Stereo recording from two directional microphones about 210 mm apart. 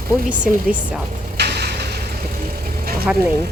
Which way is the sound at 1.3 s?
50° right (ahead or behind).